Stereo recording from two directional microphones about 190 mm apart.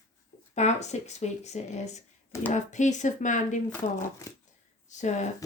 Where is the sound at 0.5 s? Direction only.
35° left (ahead or behind).